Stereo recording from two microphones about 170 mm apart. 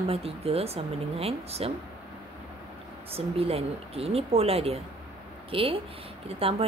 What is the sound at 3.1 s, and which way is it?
Speech, 35° right (ahead or behind).